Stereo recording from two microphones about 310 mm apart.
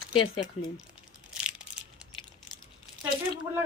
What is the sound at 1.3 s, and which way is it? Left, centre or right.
Crushing, centre.